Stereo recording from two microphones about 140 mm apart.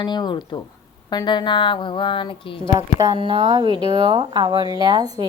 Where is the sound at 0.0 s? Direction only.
30° left (ahead or behind).